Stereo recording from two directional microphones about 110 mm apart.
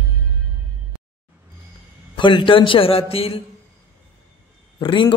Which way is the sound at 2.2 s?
50° left (ahead or behind).